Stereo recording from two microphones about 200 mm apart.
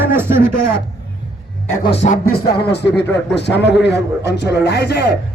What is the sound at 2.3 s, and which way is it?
A man's voice, 50° left (ahead or behind).